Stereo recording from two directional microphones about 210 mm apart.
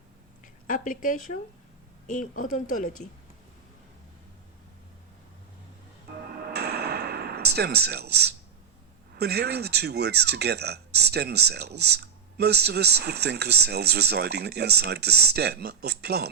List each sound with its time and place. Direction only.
0.4 s speech: 40° left (ahead or behind)
6.5 s a sound: 50° right (ahead or behind)
9.1 s speech: 50° right (ahead or behind)